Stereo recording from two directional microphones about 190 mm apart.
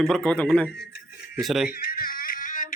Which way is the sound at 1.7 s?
50° left (ahead or behind).